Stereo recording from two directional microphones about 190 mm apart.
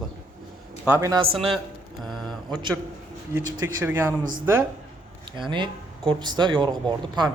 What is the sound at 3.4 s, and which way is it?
Speech, 15° right (ahead or behind).